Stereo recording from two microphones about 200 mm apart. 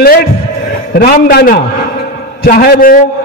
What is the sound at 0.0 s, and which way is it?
A man's voice, 50° left (ahead or behind).